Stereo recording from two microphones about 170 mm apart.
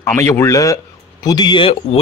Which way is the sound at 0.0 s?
15° left (ahead or behind).